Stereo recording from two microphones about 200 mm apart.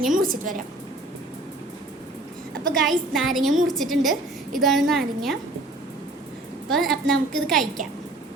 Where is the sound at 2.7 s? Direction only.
Centre (ahead or behind).